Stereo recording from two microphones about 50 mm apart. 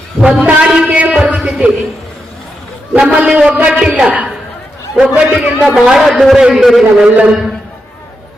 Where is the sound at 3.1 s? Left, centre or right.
Right.